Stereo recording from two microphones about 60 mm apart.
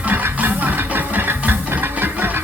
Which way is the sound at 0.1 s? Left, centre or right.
Right.